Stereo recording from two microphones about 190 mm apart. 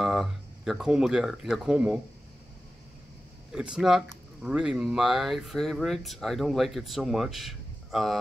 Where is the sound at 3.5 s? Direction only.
5° right (ahead or behind).